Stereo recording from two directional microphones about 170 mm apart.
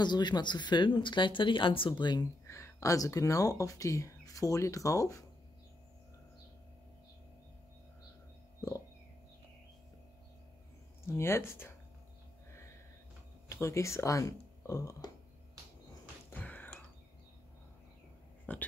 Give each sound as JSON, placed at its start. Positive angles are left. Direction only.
{"t": 0.0, "sound": "speech", "side_deg": 25}
{"t": 8.5, "sound": "a sound", "side_deg": 20}
{"t": 11.1, "sound": "speech", "side_deg": 15}
{"t": 13.5, "sound": "speech", "side_deg": 15}
{"t": 16.3, "sound": "a sound", "side_deg": 10}
{"t": 18.5, "sound": "speech", "side_deg": 10}